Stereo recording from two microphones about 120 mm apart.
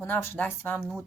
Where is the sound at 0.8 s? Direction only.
Centre (ahead or behind).